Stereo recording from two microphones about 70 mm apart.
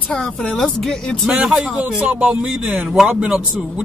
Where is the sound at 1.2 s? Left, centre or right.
Centre.